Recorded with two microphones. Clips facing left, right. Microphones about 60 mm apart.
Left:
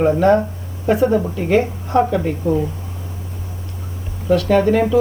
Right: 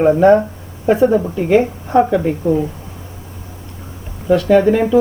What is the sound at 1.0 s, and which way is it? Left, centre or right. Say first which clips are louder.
Speech: right 3 dB; centre.